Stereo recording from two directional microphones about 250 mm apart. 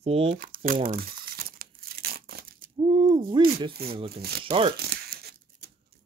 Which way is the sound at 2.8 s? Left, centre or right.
Centre.